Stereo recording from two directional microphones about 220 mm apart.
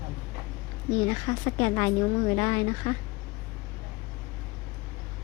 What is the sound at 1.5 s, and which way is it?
Speech, 20° left (ahead or behind).